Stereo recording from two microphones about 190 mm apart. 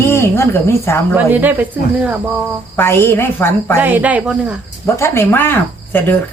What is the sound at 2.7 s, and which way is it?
Speech, 10° left (ahead or behind).